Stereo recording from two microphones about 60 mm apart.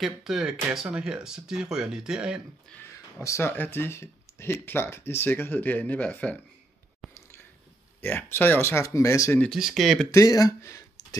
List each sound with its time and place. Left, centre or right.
0.0 s speech: centre
3.2 s speech: left
8.0 s speech: left
8.8 s speech: left
9.8 s speech: centre
10.1 s speech: left
10.6 s a sound: left